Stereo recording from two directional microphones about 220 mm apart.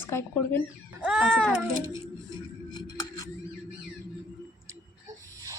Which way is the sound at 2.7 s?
15° left (ahead or behind).